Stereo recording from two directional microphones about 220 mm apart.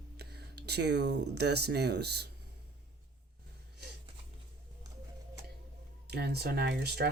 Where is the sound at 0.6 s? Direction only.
50° right (ahead or behind).